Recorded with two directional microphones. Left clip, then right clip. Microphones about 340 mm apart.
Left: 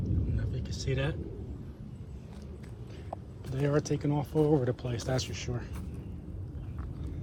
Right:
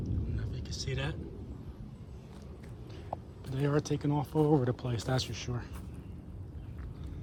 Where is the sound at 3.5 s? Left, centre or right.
Centre.